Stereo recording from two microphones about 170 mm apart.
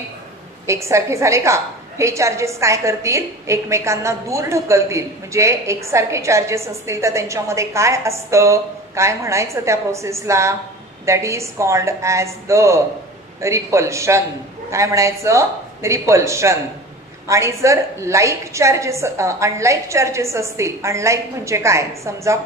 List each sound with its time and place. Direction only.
0.7 s a woman's voice: 15° right (ahead or behind)